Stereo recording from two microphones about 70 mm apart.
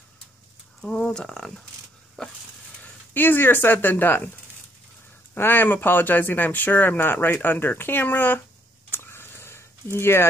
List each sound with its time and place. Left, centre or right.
0.7 s speech: centre
2.8 s speech: left
5.3 s speech: left
8.9 s a sound: left